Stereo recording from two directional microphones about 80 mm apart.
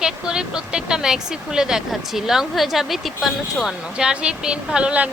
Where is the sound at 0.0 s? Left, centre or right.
Centre.